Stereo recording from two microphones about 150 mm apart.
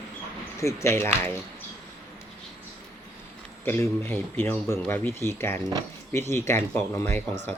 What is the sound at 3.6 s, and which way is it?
A man's voice, 15° left (ahead or behind).